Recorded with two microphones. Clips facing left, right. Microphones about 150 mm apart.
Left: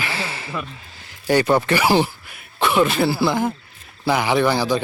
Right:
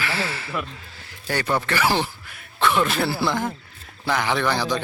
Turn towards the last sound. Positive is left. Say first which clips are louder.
# left 5 dB
turn(degrees=5)  # may be behind; listen again after turning